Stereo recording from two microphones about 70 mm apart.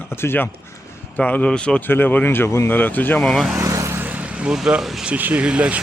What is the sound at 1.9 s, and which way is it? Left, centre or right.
Speech, left.